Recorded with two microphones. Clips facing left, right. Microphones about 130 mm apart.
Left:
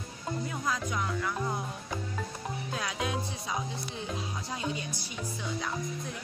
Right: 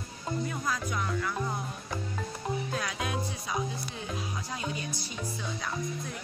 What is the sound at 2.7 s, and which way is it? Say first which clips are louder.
Music: even; 15° left (ahead or behind).